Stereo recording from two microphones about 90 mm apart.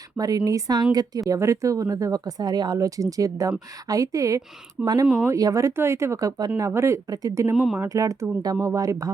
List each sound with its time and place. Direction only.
0.2 s a woman's voice: 45° right (ahead or behind)
5.0 s speech: 10° right (ahead or behind)
5.3 s speech: 40° right (ahead or behind)
6.6 s speech: 30° right (ahead or behind)
7.5 s speech: 10° right (ahead or behind)
7.9 s speech: 40° right (ahead or behind)